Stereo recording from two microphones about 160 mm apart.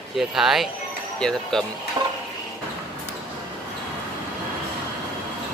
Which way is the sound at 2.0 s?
25° right (ahead or behind).